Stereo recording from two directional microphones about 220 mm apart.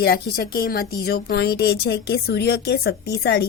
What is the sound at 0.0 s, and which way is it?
Speech, 45° left (ahead or behind).